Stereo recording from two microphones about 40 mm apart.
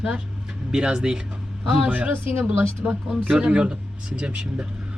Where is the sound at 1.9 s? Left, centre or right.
Right.